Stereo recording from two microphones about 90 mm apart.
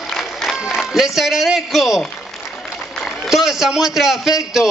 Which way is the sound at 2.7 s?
5° right (ahead or behind).